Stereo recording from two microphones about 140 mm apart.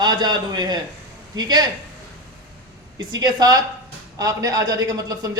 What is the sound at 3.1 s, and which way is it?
A man's voice, 30° right (ahead or behind).